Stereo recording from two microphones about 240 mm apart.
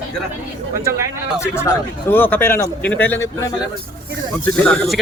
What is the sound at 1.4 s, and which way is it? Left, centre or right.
Speech, centre.